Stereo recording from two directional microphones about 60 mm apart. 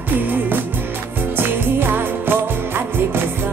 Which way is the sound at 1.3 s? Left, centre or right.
Right.